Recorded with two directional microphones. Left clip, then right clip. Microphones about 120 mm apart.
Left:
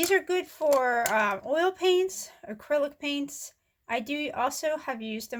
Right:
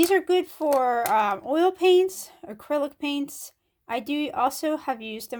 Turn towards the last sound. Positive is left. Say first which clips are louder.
# right 4 dB
turn(degrees=-35)  # may be behind; listen again after turning